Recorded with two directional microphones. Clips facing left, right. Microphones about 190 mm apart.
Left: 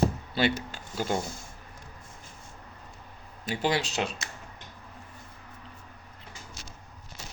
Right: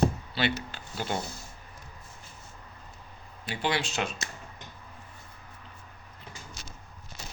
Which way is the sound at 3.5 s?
40° left (ahead or behind).